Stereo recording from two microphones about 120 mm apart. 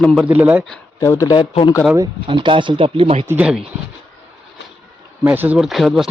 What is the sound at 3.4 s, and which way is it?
Speech, 5° right (ahead or behind).